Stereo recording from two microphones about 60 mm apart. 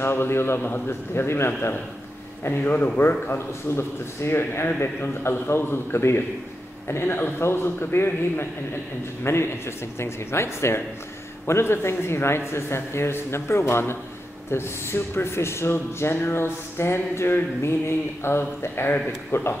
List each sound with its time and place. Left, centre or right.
0.0 s speech: left
0.6 s a man's voice: left
0.8 s a man's voice: left